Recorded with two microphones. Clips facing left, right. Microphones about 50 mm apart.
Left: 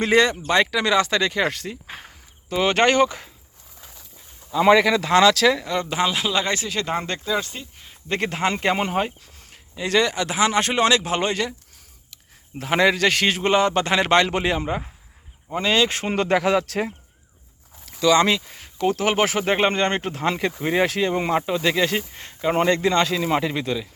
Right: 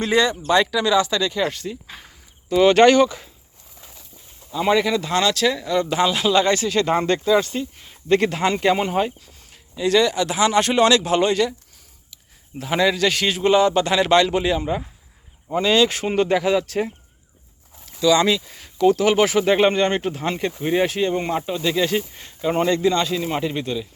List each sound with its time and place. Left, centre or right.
0.0 s speech: left
1.9 s speech: left
4.5 s speech: left
5.8 s speech: left; by 7.9 s centre
8.1 s speech: left
12.1 s a man's voice: left
15.5 s speech: left
16.0 s speech: left
18.0 s speech: left
20.2 s speech: left